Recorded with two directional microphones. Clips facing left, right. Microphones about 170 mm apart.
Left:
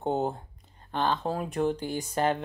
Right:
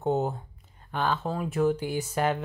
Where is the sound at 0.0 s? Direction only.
5° right (ahead or behind).